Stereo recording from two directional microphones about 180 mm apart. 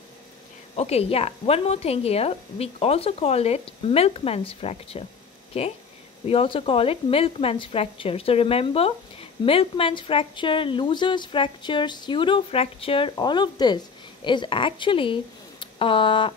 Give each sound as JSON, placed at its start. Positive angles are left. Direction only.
{"t": 0.7, "sound": "a woman's voice", "side_deg": 35}